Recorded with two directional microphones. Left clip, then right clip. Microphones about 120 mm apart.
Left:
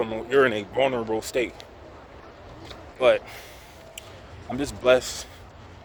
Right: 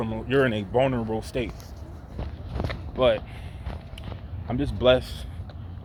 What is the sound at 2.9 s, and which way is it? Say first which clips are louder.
Speech: left 2 dB; 45° left (ahead or behind).